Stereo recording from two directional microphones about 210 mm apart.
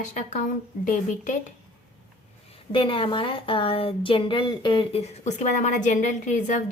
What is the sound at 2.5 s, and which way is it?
A woman's voice, 25° left (ahead or behind).